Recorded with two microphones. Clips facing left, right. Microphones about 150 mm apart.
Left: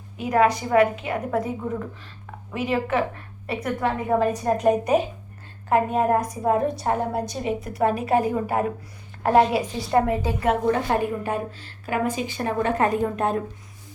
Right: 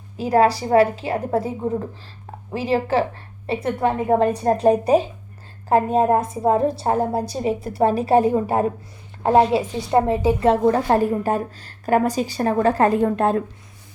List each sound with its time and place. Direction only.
0.2 s a woman's voice: 35° right (ahead or behind)